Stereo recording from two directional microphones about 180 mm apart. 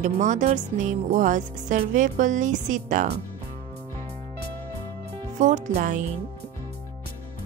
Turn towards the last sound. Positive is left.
turn(degrees=-45)  # may be behind; listen again after turning